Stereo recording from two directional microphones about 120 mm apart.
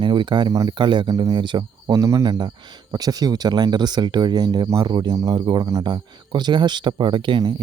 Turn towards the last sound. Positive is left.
turn(degrees=-45)  # may be behind; listen again after turning